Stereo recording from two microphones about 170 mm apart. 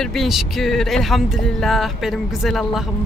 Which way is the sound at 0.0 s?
Centre (ahead or behind).